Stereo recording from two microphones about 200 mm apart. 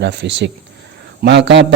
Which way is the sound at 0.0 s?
60° right (ahead or behind).